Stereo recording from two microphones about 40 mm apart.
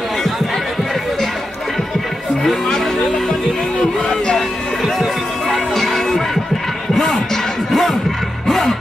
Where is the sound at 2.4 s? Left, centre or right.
Centre.